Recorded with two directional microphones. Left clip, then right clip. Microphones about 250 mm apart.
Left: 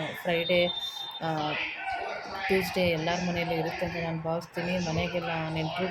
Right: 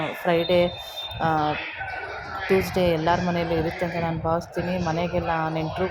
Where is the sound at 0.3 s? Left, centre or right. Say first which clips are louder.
Right 5 dB; centre.